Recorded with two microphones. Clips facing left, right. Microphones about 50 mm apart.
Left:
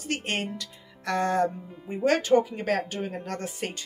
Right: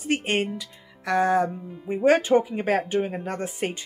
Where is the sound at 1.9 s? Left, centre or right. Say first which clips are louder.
Right 3 dB; centre.